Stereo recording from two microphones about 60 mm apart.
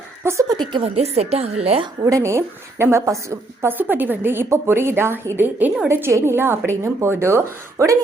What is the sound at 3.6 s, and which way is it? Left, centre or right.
A woman's voice, right.